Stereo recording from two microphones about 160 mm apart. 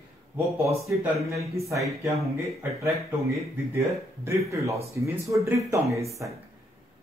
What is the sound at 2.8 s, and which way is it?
A man's voice, 20° right (ahead or behind).